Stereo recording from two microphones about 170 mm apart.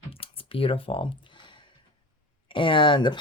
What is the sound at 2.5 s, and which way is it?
Speech, 30° left (ahead or behind).